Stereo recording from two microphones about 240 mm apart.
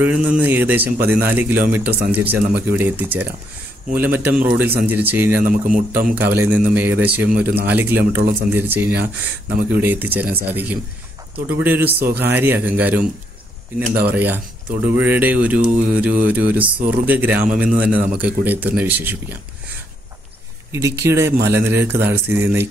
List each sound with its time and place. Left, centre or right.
0.0 s speech: centre
5.4 s speech: right
6.1 s speech: centre
20.7 s speech: centre